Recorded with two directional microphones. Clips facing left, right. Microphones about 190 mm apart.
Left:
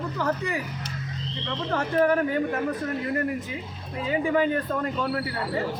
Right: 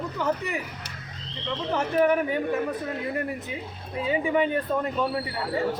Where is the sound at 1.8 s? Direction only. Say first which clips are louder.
Even; 15° right (ahead or behind).